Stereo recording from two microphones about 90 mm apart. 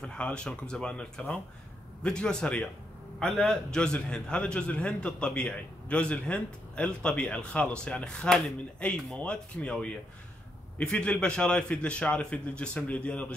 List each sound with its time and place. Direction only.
0.0 s a man's voice: 10° left (ahead or behind)